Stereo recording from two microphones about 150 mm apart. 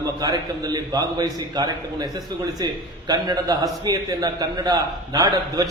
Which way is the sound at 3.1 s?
25° right (ahead or behind).